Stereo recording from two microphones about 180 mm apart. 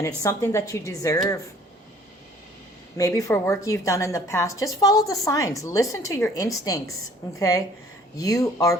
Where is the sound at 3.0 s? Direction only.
15° left (ahead or behind).